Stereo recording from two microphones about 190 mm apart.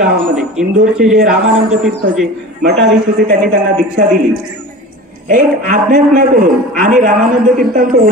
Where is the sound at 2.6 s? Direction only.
60° right (ahead or behind).